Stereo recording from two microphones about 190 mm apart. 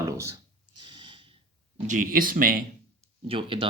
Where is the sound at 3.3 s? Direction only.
25° right (ahead or behind).